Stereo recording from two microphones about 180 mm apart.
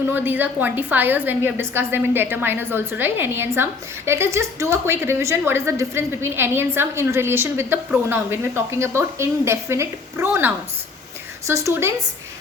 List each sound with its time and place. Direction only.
0.1 s a woman's voice: 10° right (ahead or behind)